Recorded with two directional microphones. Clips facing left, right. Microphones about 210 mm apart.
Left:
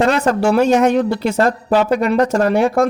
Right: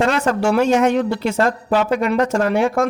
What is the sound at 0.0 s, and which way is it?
Speech, 40° left (ahead or behind).